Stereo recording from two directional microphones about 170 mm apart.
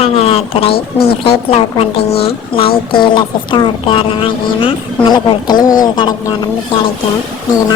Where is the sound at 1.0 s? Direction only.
35° left (ahead or behind).